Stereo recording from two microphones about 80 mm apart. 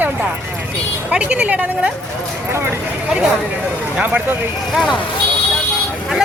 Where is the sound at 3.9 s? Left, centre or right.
Centre.